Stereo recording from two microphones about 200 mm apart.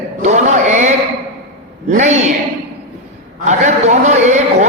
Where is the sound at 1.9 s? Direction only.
35° right (ahead or behind).